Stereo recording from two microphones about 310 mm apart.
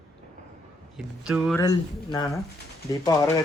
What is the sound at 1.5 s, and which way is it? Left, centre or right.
Speech, centre.